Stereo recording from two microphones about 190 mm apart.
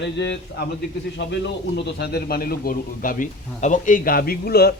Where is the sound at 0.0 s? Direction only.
65° left (ahead or behind).